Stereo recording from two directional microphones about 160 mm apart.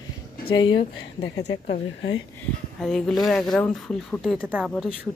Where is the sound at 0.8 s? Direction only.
45° left (ahead or behind).